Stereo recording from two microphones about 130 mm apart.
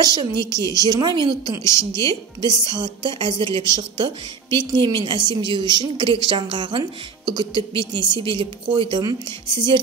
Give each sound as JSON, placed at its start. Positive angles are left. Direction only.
{"t": 0.0, "sound": "a woman's voice", "side_deg": -30}
{"t": 0.4, "sound": "a woman's voice", "side_deg": 25}
{"t": 0.7, "sound": "a woman's voice", "side_deg": -30}